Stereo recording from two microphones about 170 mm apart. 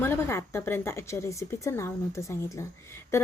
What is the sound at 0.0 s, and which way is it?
A woman's voice, 15° left (ahead or behind).